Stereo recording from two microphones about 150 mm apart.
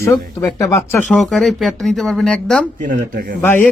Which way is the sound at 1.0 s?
Centre (ahead or behind).